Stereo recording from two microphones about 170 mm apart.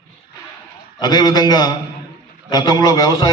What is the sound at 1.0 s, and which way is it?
A man's voice, 25° left (ahead or behind).